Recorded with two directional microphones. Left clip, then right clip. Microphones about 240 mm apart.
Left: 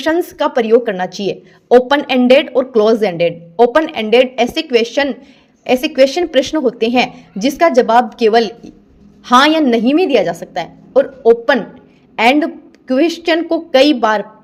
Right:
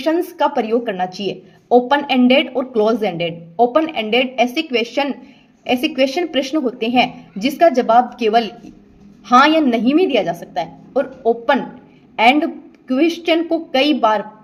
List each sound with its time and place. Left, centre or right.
0.0 s a woman's voice: left